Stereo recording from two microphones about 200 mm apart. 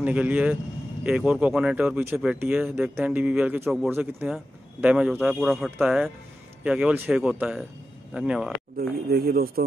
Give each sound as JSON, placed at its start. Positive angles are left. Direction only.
{"t": 0.0, "sound": "speech", "side_deg": -5}
{"t": 8.7, "sound": "a man's voice", "side_deg": -50}